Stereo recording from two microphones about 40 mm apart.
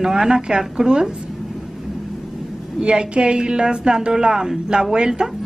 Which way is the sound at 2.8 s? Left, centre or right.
Right.